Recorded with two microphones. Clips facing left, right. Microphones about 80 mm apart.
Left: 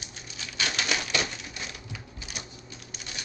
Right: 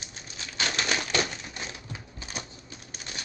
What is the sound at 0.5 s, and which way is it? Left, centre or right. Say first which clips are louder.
Typewriter: right 1 dB; right.